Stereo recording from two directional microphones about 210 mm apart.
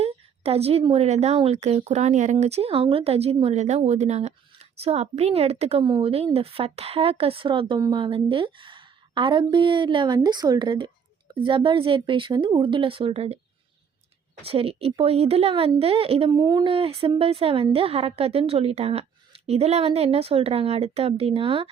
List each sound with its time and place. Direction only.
0.0 s speech: 30° right (ahead or behind)
14.4 s speech: 25° right (ahead or behind)